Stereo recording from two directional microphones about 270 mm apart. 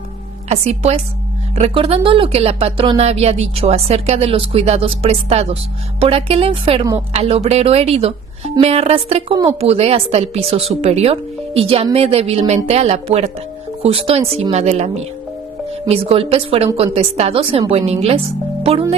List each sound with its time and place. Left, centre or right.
0.4 s speech: right
15.9 s speech: right